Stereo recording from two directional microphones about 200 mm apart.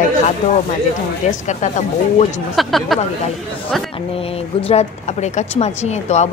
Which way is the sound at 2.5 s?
Centre (ahead or behind).